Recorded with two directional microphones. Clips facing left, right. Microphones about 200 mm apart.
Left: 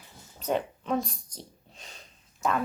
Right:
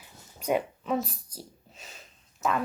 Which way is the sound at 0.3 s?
10° right (ahead or behind).